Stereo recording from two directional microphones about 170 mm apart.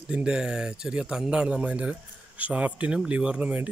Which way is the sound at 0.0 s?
5° right (ahead or behind).